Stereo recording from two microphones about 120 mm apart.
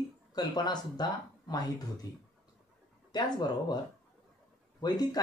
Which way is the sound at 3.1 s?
35° left (ahead or behind).